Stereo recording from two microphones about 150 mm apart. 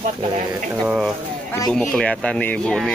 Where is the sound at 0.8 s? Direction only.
5° left (ahead or behind).